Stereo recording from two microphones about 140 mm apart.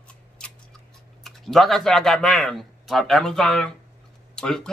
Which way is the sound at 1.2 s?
Centre (ahead or behind).